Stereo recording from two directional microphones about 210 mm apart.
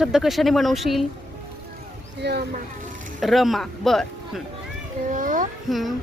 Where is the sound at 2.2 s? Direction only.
50° right (ahead or behind).